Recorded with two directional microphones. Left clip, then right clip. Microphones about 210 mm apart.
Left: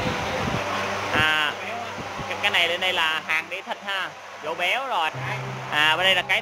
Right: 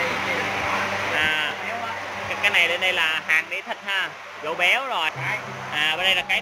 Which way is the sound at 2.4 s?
10° left (ahead or behind).